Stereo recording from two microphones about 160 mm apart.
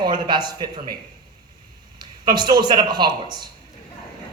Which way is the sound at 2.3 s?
25° right (ahead or behind).